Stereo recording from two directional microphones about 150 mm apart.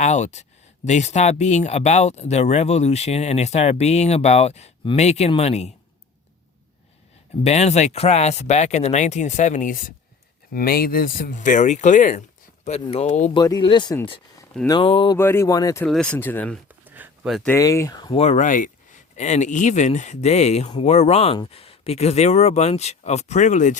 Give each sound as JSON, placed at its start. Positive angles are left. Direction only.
{"t": 0.0, "sound": "speech", "side_deg": 50}
{"t": 7.4, "sound": "speech", "side_deg": 45}
{"t": 10.5, "sound": "speech", "side_deg": 80}
{"t": 12.6, "sound": "speech", "side_deg": 45}
{"t": 13.3, "sound": "speech", "side_deg": 30}
{"t": 15.2, "sound": "speech", "side_deg": 15}
{"t": 15.8, "sound": "speech", "side_deg": 5}
{"t": 16.8, "sound": "a sound", "side_deg": -10}
{"t": 17.2, "sound": "speech", "side_deg": 0}
{"t": 17.5, "sound": "speech", "side_deg": 20}
{"t": 18.2, "sound": "speech", "side_deg": 55}